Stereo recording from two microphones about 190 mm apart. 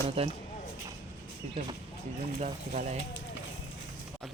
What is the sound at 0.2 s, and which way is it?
Speech, 30° right (ahead or behind).